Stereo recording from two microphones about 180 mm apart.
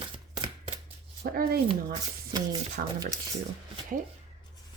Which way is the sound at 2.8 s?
55° right (ahead or behind).